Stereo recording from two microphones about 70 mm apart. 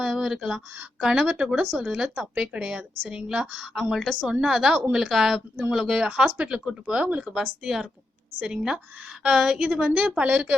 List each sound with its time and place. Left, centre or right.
0.0 s speech: centre
8.4 s a woman's voice: right
9.2 s speech: centre